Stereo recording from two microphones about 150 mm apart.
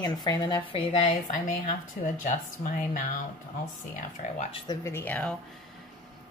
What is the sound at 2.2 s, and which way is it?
Speech, 60° left (ahead or behind).